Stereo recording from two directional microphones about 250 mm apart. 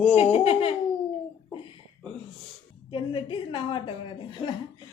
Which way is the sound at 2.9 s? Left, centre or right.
Centre.